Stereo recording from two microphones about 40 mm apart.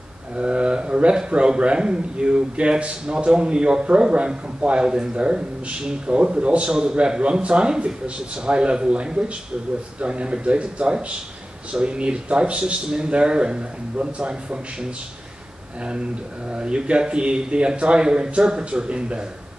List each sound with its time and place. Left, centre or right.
0.4 s speech: right
16.4 s speech: right